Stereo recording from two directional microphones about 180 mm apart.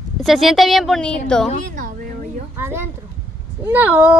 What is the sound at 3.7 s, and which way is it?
Speech, 10° right (ahead or behind).